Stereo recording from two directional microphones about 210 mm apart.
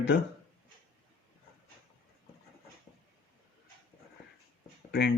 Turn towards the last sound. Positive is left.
turn(degrees=55)  # may be behind; listen again after turning